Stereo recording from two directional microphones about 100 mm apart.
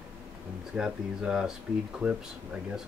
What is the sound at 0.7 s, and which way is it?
Speech, 5° right (ahead or behind).